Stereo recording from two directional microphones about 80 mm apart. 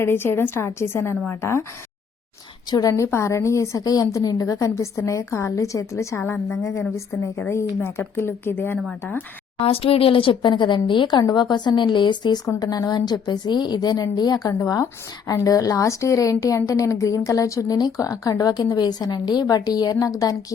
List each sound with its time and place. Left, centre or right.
0.0 s a woman's voice: left
2.6 s a woman's voice: left
2.9 s a woman's voice: left
4.5 s a woman's voice: left
10.1 s a woman's voice: left
12.5 s a woman's voice: left